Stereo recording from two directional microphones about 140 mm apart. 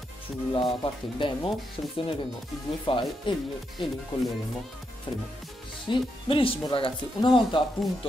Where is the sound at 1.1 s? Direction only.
35° left (ahead or behind).